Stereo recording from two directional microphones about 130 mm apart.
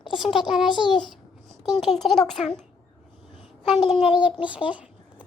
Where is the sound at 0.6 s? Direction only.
40° left (ahead or behind).